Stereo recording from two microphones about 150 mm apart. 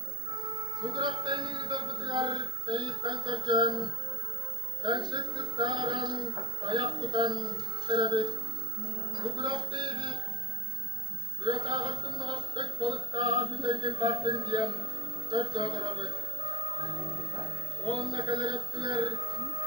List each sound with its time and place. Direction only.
0.7 s music: 30° right (ahead or behind)
9.1 s speech: 30° right (ahead or behind)
11.4 s a sound: 30° right (ahead or behind)